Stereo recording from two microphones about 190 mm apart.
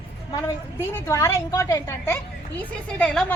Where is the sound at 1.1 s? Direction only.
15° left (ahead or behind).